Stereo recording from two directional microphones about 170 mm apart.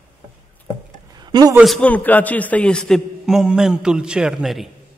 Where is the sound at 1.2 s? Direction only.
25° right (ahead or behind).